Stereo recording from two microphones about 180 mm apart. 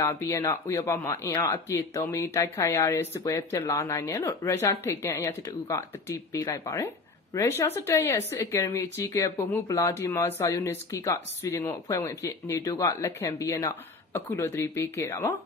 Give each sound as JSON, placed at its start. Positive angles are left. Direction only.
{"t": 0.0, "sound": "speech", "side_deg": 15}